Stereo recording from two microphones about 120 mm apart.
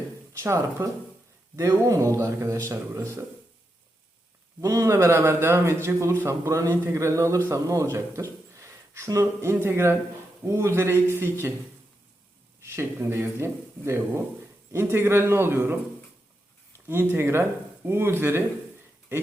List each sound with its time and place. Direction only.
0.3 s a man's voice: 25° right (ahead or behind)
4.6 s a man's voice: 25° right (ahead or behind)
12.6 s a man's voice: 20° right (ahead or behind)
16.9 s a man's voice: 20° right (ahead or behind)